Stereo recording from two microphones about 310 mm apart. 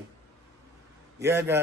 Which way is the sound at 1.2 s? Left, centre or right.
Centre.